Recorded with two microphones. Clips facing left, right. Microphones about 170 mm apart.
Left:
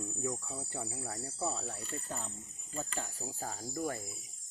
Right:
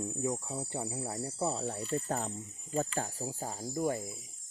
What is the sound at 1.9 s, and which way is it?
Speech, 50° right (ahead or behind).